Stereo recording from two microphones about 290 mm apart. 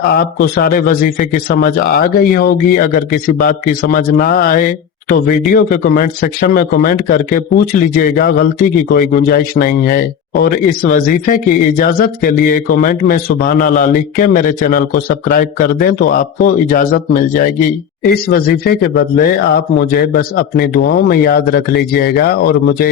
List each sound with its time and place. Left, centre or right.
0.2 s a man's voice: left